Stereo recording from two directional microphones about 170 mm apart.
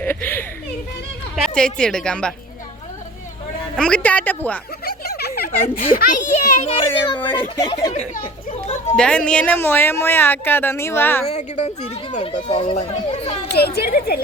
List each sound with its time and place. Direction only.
0.0 s a sound: 10° left (ahead or behind)
1.4 s a woman's voice: 5° left (ahead or behind)
3.8 s speech: 5° left (ahead or behind)
4.9 s a sound: 65° left (ahead or behind)
5.5 s a child's voice: 50° left (ahead or behind); by 7.9 s 25° left (ahead or behind)
8.4 s children playing: 45° left (ahead or behind)
9.0 s speech: 5° left (ahead or behind)
11.3 s speech: 40° left (ahead or behind)
13.5 s speech: 65° left (ahead or behind)